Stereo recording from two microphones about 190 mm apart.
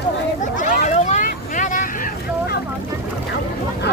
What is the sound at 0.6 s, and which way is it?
Vehicle, 40° left (ahead or behind).